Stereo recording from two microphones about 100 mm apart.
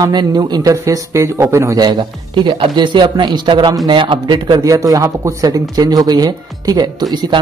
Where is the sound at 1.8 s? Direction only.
50° right (ahead or behind).